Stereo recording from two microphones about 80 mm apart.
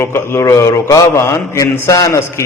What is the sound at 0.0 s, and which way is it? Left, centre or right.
A man's voice, left.